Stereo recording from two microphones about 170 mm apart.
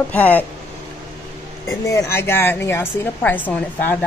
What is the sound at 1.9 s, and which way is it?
Speech, 15° left (ahead or behind).